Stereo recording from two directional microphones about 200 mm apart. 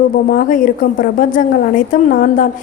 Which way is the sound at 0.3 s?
45° left (ahead or behind).